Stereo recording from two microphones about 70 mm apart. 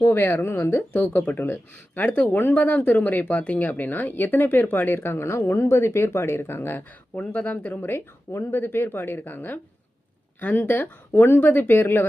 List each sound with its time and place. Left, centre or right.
0.0 s speech: left
0.8 s speech: left
5.4 s speech: left